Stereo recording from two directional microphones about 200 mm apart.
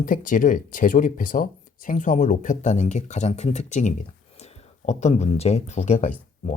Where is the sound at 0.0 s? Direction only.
40° left (ahead or behind).